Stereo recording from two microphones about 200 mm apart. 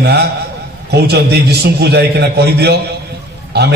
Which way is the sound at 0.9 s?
55° right (ahead or behind).